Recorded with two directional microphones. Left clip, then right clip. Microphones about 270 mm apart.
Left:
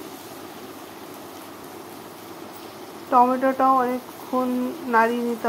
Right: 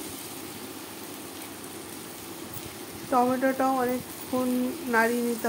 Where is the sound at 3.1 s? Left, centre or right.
Centre.